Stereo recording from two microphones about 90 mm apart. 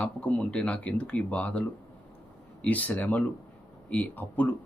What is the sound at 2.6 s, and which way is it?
Speech, 15° left (ahead or behind).